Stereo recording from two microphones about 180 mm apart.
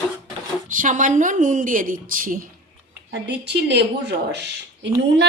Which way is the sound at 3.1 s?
70° right (ahead or behind).